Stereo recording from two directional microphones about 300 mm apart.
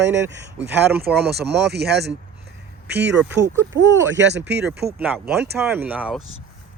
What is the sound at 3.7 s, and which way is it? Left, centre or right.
Speech, right.